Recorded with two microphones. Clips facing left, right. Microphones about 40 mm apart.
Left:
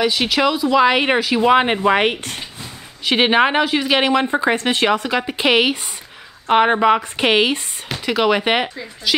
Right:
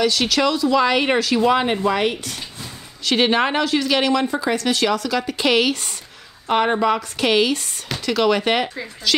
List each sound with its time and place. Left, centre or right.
0.0 s speech: centre; by 2.4 s left
3.1 s speech: left